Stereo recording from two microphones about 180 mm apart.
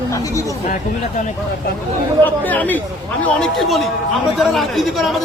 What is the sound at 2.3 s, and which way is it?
A man's voice, 10° left (ahead or behind).